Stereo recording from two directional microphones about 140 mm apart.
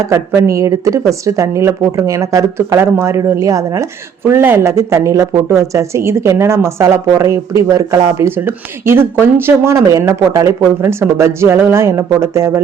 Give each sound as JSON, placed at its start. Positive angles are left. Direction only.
{"t": 0.1, "sound": "speech", "side_deg": -20}